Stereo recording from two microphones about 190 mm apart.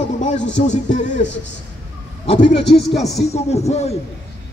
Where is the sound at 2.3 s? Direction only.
30° left (ahead or behind).